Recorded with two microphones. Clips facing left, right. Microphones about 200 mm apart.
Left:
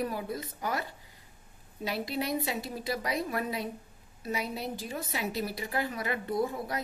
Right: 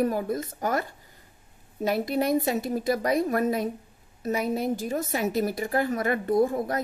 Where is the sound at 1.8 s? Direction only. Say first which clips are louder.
Right 8 dB; 50° right (ahead or behind).